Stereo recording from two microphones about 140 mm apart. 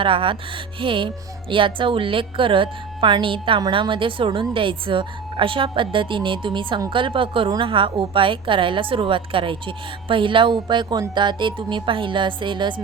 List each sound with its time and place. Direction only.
0.0 s a woman's voice: 40° right (ahead or behind)